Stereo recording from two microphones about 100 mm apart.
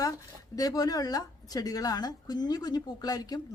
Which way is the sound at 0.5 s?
40° left (ahead or behind).